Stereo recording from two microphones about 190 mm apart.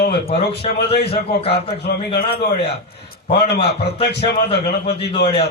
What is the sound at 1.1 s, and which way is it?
Speech, 30° left (ahead or behind).